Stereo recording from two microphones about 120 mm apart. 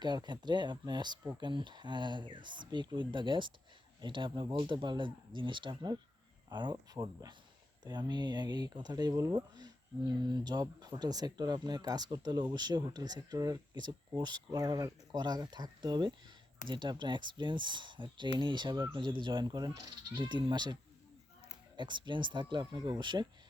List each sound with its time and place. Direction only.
0.0 s speech: 40° right (ahead or behind)
21.8 s speech: 40° right (ahead or behind)